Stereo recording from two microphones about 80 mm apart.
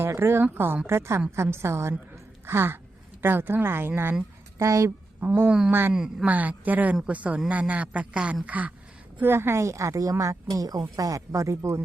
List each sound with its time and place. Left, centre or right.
0.0 s a woman's voice: right
4.5 s speech: right
5.2 s speech: right
5.5 s a man's voice: centre
6.2 s a man's voice: centre; by 11.8 s right